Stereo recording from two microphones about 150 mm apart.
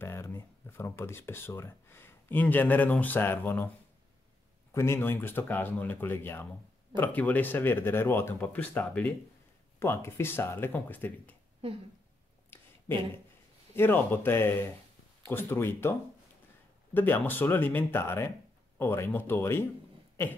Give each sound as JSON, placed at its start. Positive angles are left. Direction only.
{"t": 0.0, "sound": "speech", "side_deg": 15}
{"t": 4.7, "sound": "speech", "side_deg": 15}
{"t": 11.6, "sound": "speech", "side_deg": -40}
{"t": 12.5, "sound": "a sound", "side_deg": 15}
{"t": 13.7, "sound": "speech", "side_deg": 15}
{"t": 16.9, "sound": "speech", "side_deg": 15}